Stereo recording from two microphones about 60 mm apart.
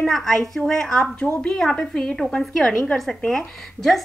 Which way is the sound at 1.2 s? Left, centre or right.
Centre.